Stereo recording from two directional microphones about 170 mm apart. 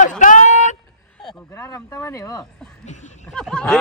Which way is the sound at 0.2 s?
45° left (ahead or behind).